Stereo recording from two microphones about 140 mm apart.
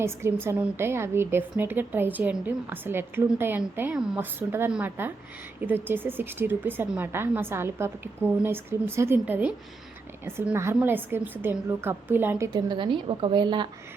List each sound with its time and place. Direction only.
0.0 s a woman's voice: 20° right (ahead or behind)
12.5 s a woman's voice: 35° right (ahead or behind)